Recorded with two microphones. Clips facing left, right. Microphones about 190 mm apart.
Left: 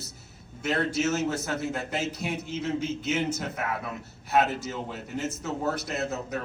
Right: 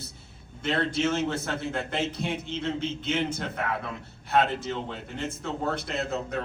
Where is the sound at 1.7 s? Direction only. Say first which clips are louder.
Right 1 dB; 5° left (ahead or behind).